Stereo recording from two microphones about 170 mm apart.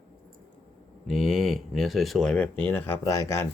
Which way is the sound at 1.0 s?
Centre (ahead or behind).